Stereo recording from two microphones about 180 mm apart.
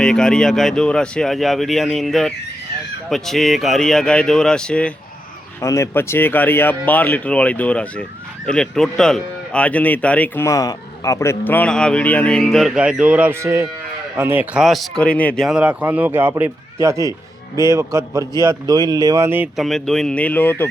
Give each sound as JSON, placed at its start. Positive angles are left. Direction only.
{"t": 0.0, "sound": "speech", "side_deg": 5}
{"t": 15.4, "sound": "a man's voice", "side_deg": -5}
{"t": 19.5, "sound": "speech", "side_deg": 0}